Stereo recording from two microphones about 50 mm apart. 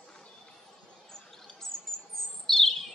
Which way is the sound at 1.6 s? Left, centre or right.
Centre.